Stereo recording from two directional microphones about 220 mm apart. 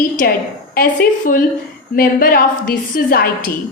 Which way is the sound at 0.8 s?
40° left (ahead or behind).